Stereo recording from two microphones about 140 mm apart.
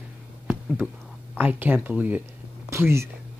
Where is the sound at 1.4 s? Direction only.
15° right (ahead or behind).